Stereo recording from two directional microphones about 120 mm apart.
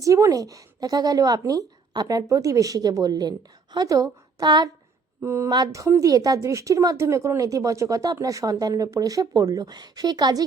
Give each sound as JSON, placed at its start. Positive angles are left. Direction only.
{"t": 0.0, "sound": "a woman's voice", "side_deg": -25}
{"t": 5.2, "sound": "a woman's voice", "side_deg": -20}
{"t": 5.5, "sound": "a woman's voice", "side_deg": -35}